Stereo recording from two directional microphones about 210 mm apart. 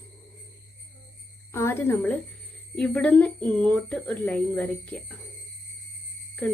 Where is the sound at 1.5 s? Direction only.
10° left (ahead or behind).